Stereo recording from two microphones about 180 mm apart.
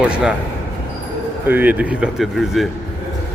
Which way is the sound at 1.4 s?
10° right (ahead or behind).